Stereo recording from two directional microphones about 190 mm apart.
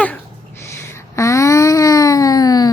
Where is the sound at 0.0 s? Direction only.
10° left (ahead or behind).